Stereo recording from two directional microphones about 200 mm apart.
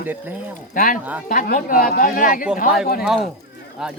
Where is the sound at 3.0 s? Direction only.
Centre (ahead or behind).